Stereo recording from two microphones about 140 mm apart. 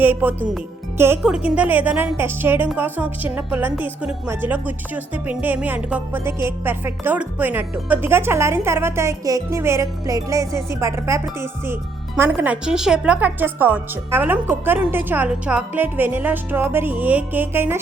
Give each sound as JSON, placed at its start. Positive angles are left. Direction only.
{"t": 0.0, "sound": "a woman's voice", "side_deg": -15}